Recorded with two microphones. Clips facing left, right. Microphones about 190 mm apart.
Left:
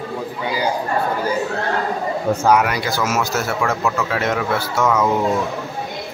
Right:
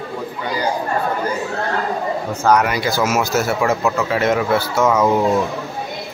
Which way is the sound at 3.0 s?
10° right (ahead or behind).